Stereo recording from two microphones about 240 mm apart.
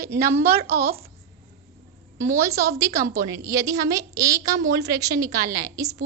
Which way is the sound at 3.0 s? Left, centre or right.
Centre.